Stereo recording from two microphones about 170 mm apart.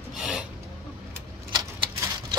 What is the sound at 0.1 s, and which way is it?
Filing, 5° right (ahead or behind).